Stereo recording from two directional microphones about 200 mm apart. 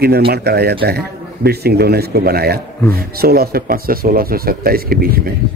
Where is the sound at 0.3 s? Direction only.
55° right (ahead or behind).